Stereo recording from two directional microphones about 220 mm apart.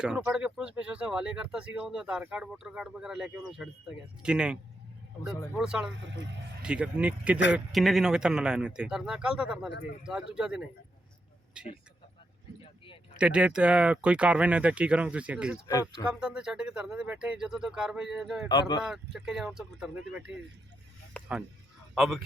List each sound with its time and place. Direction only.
0.0 s speech: 5° right (ahead or behind)
5.5 s speech: 5° right (ahead or behind)
5.9 s speech: 55° right (ahead or behind)
6.6 s speech: 5° right (ahead or behind)
13.1 s speech: 5° right (ahead or behind)
15.6 s speech: 15° left (ahead or behind)
16.0 s speech: 5° right (ahead or behind)
21.2 s honk: 5° left (ahead or behind)
21.9 s speech: centre (ahead or behind)